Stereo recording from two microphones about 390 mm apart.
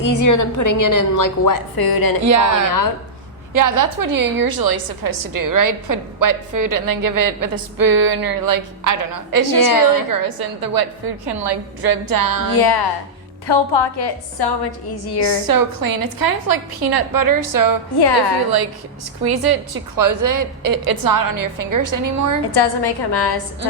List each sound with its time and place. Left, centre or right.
0.0 s a woman's voice: left
2.2 s a woman's voice: right
3.5 s a woman's voice: right
9.6 s a woman's voice: left
10.1 s a woman's voice: right
12.5 s a woman's voice: left
13.5 s a woman's voice: left
15.2 s a woman's voice: right
19.2 s a woman's voice: right
22.5 s a woman's voice: left